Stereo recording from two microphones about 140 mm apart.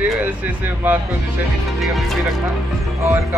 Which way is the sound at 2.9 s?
20° right (ahead or behind).